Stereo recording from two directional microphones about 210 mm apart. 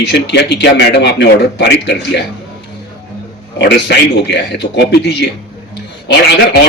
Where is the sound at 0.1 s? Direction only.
55° left (ahead or behind).